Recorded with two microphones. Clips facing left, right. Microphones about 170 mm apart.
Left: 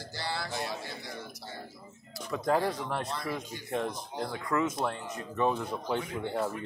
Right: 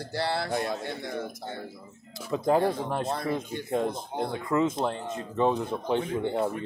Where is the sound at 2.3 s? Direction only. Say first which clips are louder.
Right 4 dB; 25° right (ahead or behind).